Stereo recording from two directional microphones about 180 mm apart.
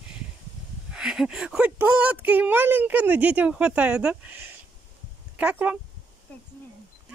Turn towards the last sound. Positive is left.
turn(degrees=-10)  # may be behind; listen again after turning